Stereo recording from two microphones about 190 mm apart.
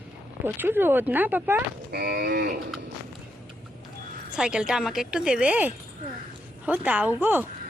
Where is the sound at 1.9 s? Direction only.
55° right (ahead or behind).